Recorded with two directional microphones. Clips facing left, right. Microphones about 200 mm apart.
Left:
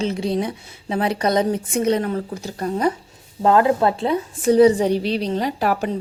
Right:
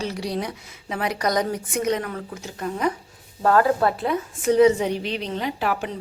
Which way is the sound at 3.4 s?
25° left (ahead or behind).